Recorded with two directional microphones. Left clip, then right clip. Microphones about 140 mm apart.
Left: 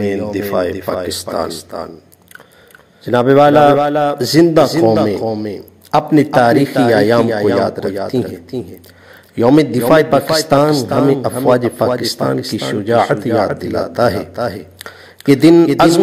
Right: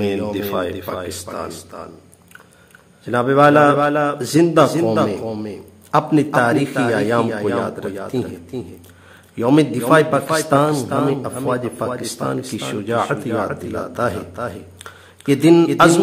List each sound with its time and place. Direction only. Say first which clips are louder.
0.0 s speech: left 3 dB; 15° left (ahead or behind)
3.1 s a man's voice: left 4 dB; 30° left (ahead or behind)
5.2 s speech: left 7 dB; 15° left (ahead or behind)
5.9 s a man's voice: left 4 dB; 25° left (ahead or behind)
9.6 s a man's voice: left 1 dB; 30° left (ahead or behind)